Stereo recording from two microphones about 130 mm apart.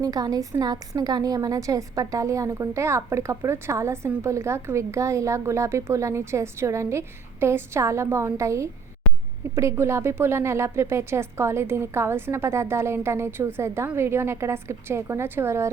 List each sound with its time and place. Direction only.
0.0 s a woman's voice: 30° right (ahead or behind)